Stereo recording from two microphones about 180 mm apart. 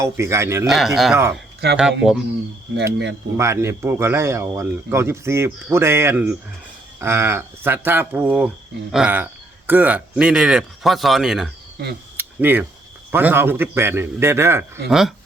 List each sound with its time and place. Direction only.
0.0 s speech: 15° right (ahead or behind)
0.7 s speech: centre (ahead or behind)
2.7 s speech: 70° right (ahead or behind)
3.3 s speech: 15° right (ahead or behind)
11.8 s speech: 70° right (ahead or behind)
12.1 s a sound: 10° right (ahead or behind)
13.1 s speech: 10° right (ahead or behind)
14.8 s speech: centre (ahead or behind)